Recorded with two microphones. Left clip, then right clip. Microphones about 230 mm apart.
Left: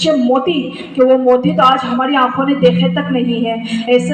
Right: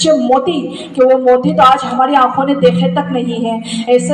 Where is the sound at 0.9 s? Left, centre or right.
Centre.